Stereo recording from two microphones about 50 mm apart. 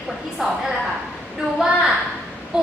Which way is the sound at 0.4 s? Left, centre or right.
Centre.